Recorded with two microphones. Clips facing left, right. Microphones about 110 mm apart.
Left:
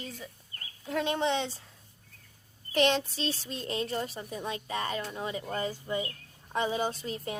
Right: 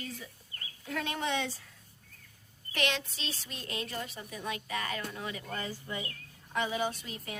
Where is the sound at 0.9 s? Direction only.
25° left (ahead or behind).